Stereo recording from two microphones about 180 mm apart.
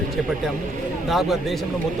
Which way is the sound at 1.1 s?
Centre (ahead or behind).